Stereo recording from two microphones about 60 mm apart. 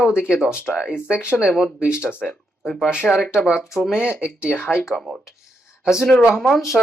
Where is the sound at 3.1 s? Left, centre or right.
Centre.